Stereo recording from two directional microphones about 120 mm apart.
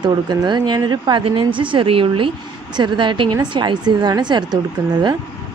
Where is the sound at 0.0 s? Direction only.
35° right (ahead or behind).